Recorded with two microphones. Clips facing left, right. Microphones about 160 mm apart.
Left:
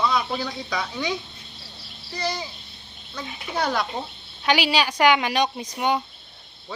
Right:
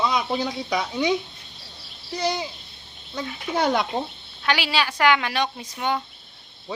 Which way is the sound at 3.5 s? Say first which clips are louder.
Right 3 dB; 20° right (ahead or behind).